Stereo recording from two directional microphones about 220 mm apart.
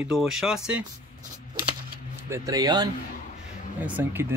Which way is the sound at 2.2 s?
15° right (ahead or behind).